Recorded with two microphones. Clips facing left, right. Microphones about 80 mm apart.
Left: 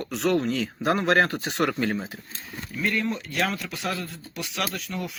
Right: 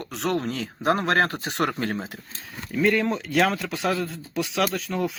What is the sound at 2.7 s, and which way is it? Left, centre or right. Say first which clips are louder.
Speech: right 5 dB; right.